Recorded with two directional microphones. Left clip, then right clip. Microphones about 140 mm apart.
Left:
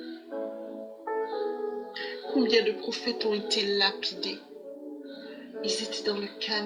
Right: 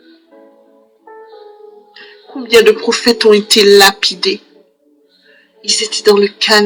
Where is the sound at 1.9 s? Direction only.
40° left (ahead or behind).